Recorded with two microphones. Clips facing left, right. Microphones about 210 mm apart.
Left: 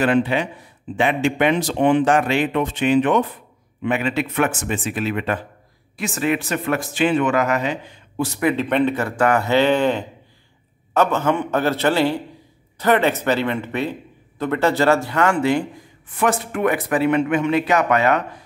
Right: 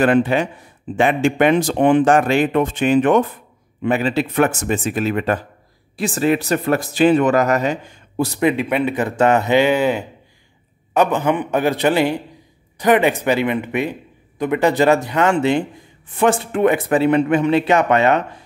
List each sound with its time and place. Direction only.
0.0 s speech: 50° right (ahead or behind)
3.8 s speech: 35° right (ahead or behind)
8.5 s a man's voice: 10° right (ahead or behind); by 18.2 s 25° right (ahead or behind)